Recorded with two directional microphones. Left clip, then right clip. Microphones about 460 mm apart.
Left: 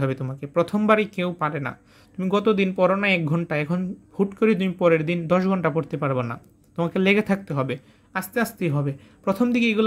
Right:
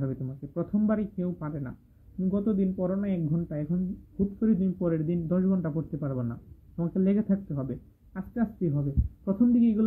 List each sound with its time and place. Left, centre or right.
0.0 s speech: centre